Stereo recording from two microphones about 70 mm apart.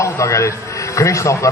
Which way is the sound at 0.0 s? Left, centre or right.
Left.